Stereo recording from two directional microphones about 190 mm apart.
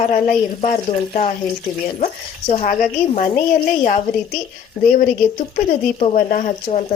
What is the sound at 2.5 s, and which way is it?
Speech, 40° left (ahead or behind).